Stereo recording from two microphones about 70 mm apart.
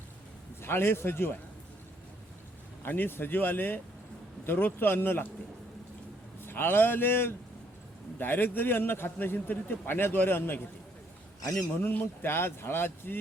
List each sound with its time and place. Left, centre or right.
0.6 s a man's voice: left
2.8 s a man's voice: left
6.4 s a man's voice: left
11.8 s a man's voice: left